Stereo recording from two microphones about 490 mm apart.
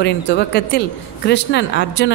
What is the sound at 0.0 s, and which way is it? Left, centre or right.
A woman's voice, left.